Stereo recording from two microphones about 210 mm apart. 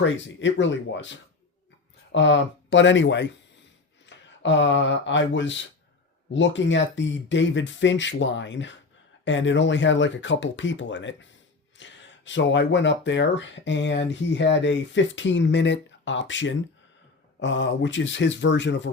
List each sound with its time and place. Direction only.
0.0 s speech: 60° left (ahead or behind)